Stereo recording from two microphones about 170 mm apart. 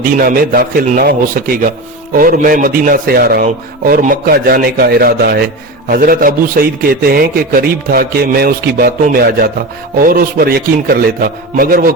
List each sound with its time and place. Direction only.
0.2 s a man's voice: 60° right (ahead or behind)